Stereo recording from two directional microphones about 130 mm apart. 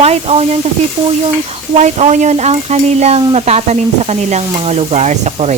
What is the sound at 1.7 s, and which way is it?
Speech, 60° right (ahead or behind).